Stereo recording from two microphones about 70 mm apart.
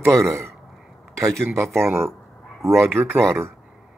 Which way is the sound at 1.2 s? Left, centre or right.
Centre.